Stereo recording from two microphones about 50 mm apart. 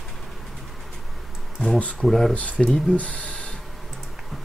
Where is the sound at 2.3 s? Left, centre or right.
Left.